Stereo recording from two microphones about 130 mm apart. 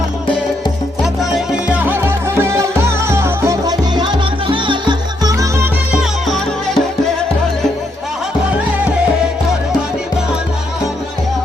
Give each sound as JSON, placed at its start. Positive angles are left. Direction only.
{"t": 1.0, "sound": "music", "side_deg": -5}
{"t": 5.9, "sound": "music", "side_deg": 0}